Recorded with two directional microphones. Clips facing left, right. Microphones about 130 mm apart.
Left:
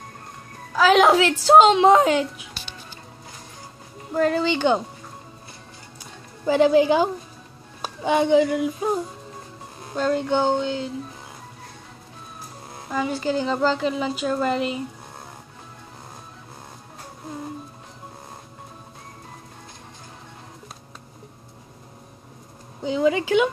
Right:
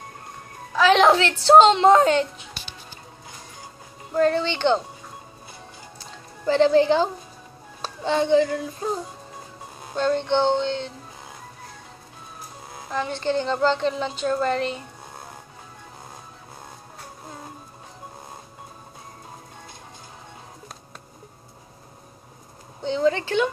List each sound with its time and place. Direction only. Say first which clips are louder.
0.7 s speech: left 1 dB; 5° left (ahead or behind)
4.1 s speech: even; 5° left (ahead or behind)
6.4 s speech: left 1 dB; 15° left (ahead or behind)
12.9 s a woman's voice: left 1 dB; 5° left (ahead or behind)
22.8 s speech: left 1 dB; 5° left (ahead or behind)